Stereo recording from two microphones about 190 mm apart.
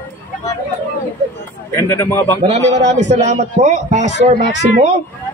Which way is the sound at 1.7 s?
15° left (ahead or behind).